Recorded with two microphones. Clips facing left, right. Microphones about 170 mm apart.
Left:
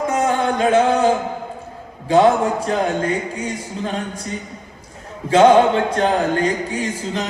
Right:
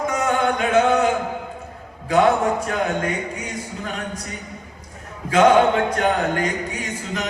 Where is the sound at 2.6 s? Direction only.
30° left (ahead or behind).